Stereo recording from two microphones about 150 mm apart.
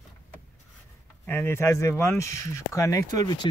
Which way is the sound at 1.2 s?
15° left (ahead or behind).